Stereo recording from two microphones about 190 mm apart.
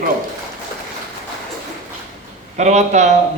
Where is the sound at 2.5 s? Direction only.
35° right (ahead or behind).